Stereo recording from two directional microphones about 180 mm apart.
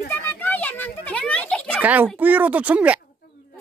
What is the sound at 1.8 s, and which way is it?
Speech, 10° right (ahead or behind).